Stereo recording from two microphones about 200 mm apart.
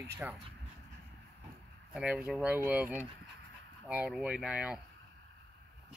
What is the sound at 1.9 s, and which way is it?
Speech, 5° right (ahead or behind).